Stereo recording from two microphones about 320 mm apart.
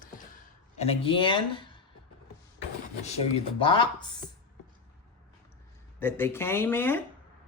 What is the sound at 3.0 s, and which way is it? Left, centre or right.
Speech, centre.